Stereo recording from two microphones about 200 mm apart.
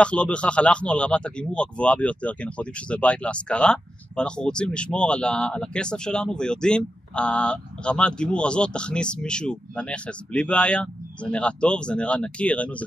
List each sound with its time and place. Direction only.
0.0 s speech: 5° left (ahead or behind)